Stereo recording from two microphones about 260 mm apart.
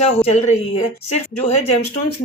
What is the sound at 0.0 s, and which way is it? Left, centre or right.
Speech, left.